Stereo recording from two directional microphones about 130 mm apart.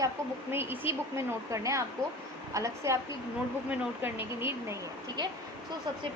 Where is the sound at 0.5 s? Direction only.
15° right (ahead or behind).